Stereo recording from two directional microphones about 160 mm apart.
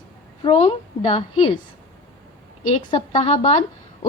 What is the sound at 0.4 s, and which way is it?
A woman's voice, 35° left (ahead or behind).